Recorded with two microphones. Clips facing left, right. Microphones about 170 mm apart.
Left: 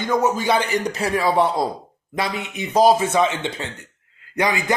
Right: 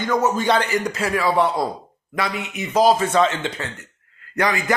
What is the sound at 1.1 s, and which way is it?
Speech, 30° left (ahead or behind).